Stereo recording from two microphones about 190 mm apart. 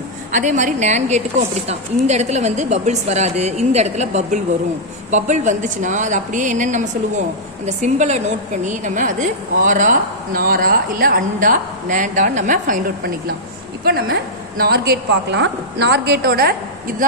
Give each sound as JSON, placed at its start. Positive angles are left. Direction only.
{"t": 0.3, "sound": "a woman's voice", "side_deg": -40}